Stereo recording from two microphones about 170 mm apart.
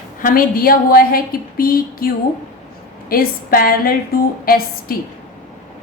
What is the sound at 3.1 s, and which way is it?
A woman's voice, 60° left (ahead or behind).